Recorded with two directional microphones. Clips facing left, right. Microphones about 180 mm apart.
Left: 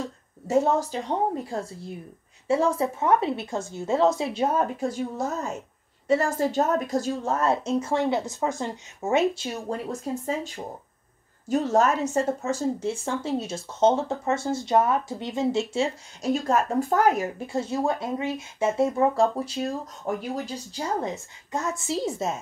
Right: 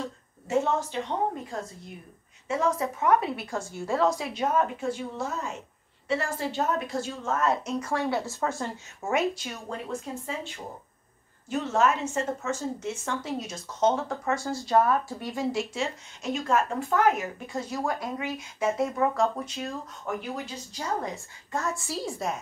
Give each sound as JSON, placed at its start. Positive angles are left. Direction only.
{"t": 0.5, "sound": "a woman's voice", "side_deg": 40}
{"t": 10.2, "sound": "speech", "side_deg": 40}
{"t": 21.0, "sound": "a woman's voice", "side_deg": 20}